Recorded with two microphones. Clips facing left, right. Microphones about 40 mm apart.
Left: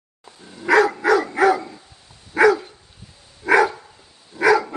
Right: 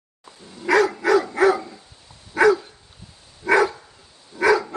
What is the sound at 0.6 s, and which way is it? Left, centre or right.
Dog, centre.